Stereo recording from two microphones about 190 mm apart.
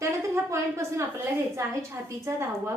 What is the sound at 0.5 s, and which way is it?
A woman's voice, 15° right (ahead or behind).